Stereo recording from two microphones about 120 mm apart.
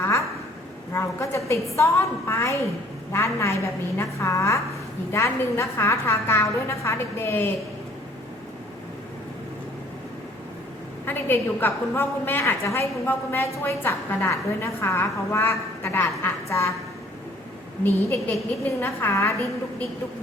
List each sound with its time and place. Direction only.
0.0 s a sound: 25° left (ahead or behind)
0.9 s a woman's voice: 20° left (ahead or behind)
11.0 s a woman's voice: 15° left (ahead or behind)
17.8 s a woman's voice: 15° left (ahead or behind)